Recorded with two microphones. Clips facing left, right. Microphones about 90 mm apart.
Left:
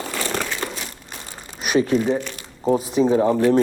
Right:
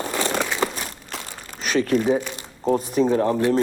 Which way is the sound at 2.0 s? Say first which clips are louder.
Right 1 dB; 10° right (ahead or behind).